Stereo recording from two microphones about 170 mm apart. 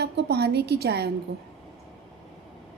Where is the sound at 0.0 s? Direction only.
75° right (ahead or behind).